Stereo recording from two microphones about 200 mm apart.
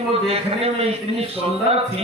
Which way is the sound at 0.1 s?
30° right (ahead or behind).